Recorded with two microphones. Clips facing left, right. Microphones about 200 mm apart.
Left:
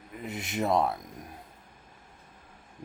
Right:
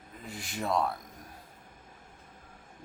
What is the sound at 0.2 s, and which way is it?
Speech, 20° left (ahead or behind).